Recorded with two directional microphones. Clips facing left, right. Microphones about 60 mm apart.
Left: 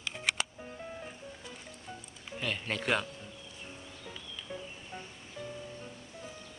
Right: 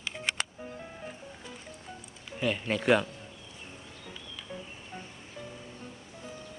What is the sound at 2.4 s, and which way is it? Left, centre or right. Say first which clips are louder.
Speech: right 6 dB; centre.